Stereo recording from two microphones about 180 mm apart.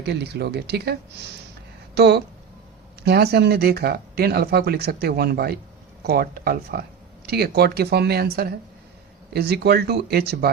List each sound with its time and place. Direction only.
0.0 s speech: 70° right (ahead or behind)